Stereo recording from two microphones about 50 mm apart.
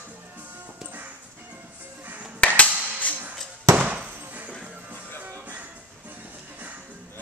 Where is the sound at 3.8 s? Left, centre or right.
Right.